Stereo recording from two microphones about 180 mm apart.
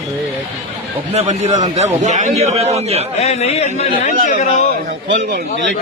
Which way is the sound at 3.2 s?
35° left (ahead or behind).